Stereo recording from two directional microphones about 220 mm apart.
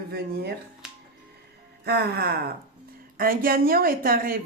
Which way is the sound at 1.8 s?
45° right (ahead or behind).